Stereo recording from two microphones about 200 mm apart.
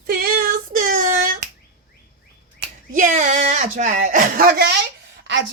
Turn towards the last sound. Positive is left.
turn(degrees=-65)  # may be behind; listen again after turning